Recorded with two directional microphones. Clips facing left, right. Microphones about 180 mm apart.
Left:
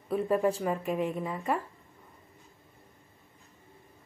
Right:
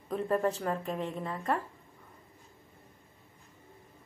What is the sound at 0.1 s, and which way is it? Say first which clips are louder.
A woman's voice: left 3 dB; 10° left (ahead or behind).